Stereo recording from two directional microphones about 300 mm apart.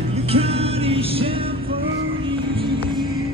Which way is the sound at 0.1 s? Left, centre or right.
Centre.